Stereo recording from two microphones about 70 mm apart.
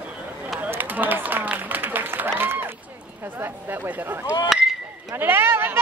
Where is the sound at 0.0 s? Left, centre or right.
Centre.